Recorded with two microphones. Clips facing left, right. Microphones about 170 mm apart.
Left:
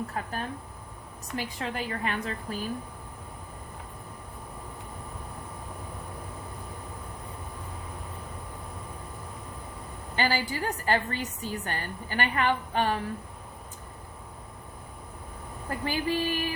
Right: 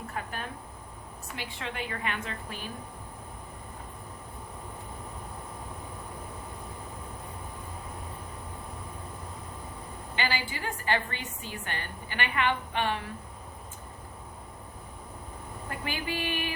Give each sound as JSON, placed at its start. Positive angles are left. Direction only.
{"t": 0.1, "sound": "a woman's voice", "side_deg": 35}
{"t": 10.2, "sound": "a woman's voice", "side_deg": 40}
{"t": 15.8, "sound": "a woman's voice", "side_deg": 35}